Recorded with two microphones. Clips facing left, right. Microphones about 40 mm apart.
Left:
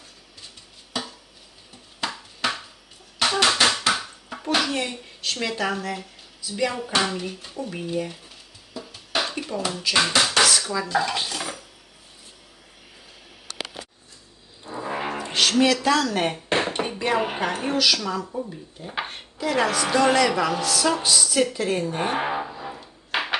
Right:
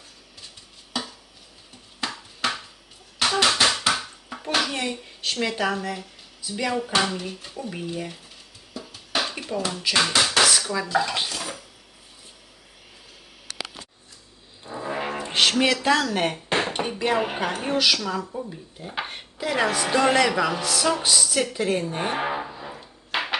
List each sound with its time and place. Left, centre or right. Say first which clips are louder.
2.0 s a sound: left 1 dB; centre
4.5 s speech: left 1 dB; centre
8.7 s music: even; centre
9.9 s a sound: left 1 dB; centre
10.6 s dishes: even; centre
10.8 s speech: even; centre
11.3 s dishes: left 1 dB; centre
14.6 s music: even; centre
15.3 s a sound: right 2 dB; right
15.6 s speech: left 1 dB; right
16.0 s speech: left 1 dB; centre
21.1 s a sound: left 2 dB; centre